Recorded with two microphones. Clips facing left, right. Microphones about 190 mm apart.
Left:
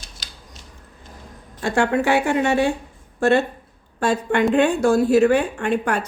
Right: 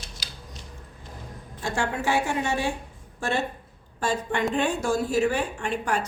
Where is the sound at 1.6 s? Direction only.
65° left (ahead or behind).